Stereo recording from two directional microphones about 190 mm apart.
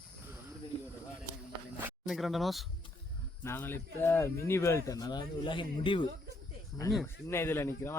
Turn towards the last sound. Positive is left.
turn(degrees=15)  # may be behind; listen again after turning